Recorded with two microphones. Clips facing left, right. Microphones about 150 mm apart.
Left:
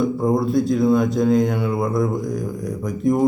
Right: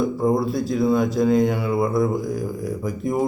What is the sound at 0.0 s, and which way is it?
Speech, centre (ahead or behind).